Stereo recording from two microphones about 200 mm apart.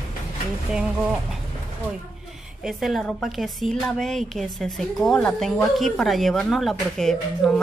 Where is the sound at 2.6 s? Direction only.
Centre (ahead or behind).